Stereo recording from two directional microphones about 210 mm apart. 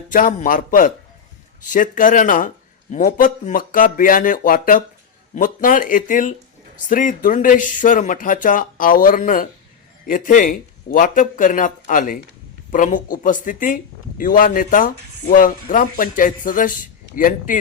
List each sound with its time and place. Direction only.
0.1 s speech: 40° left (ahead or behind)